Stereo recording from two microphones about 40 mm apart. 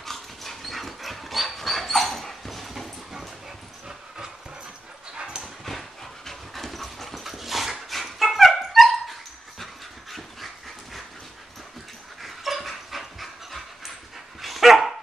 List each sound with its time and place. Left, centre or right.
0.0 s dog: centre
5.1 s dog: right
5.4 s dog: centre
10.1 s dog: centre
12.2 s dog: centre